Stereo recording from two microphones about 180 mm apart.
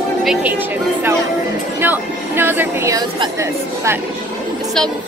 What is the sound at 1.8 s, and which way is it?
Speech, 10° right (ahead or behind).